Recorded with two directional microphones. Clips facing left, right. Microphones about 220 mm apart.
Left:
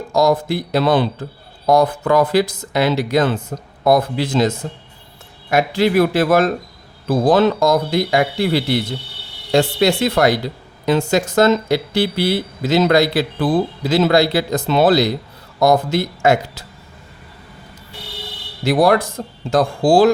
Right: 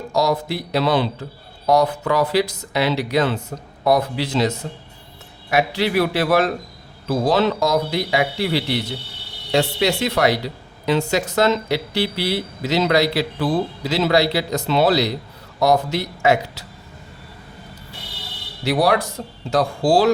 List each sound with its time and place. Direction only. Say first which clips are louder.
0.1 s speech: left 5 dB; 50° left (ahead or behind)
18.6 s speech: left 4 dB; 50° left (ahead or behind)